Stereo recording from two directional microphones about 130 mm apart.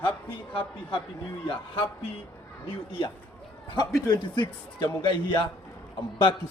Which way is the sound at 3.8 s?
30° left (ahead or behind).